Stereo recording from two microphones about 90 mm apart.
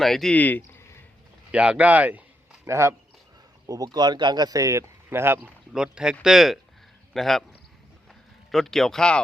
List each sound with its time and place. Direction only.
0.0 s speech: 5° left (ahead or behind)
0.3 s speech: 20° left (ahead or behind)
1.5 s speech: 10° right (ahead or behind)
2.6 s speech: 35° right (ahead or behind)
3.7 s speech: 45° right (ahead or behind)
5.0 s speech: 25° right (ahead or behind)
5.7 s speech: 10° right (ahead or behind)
8.5 s speech: 5° left (ahead or behind)